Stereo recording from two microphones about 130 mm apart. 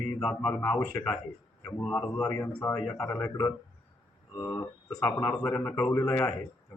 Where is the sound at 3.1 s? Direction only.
20° left (ahead or behind).